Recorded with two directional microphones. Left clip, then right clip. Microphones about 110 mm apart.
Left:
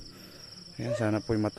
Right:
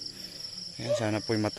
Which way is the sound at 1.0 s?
30° left (ahead or behind).